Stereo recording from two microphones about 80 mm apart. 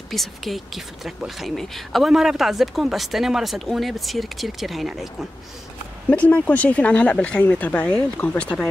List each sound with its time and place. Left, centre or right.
0.1 s speech: centre
6.0 s speech: centre